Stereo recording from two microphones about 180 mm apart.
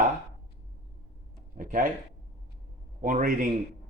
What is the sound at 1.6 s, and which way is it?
Speech, 50° right (ahead or behind).